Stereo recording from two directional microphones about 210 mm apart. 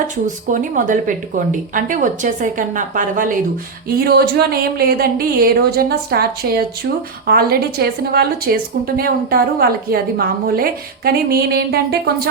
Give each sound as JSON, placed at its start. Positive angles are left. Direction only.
{"t": 0.5, "sound": "a woman's voice", "side_deg": -40}